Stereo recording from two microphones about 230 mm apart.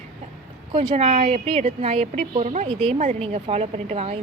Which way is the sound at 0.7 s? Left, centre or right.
Right.